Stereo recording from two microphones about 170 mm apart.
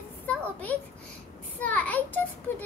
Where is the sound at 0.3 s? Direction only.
10° left (ahead or behind).